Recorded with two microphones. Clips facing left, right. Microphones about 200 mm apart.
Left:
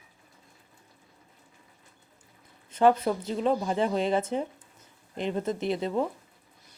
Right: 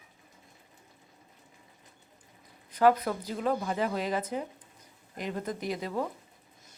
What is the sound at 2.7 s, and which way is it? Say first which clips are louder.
Speech: left 2 dB; 25° left (ahead or behind).